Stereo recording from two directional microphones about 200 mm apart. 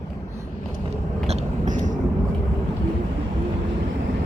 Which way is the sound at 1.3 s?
40° right (ahead or behind).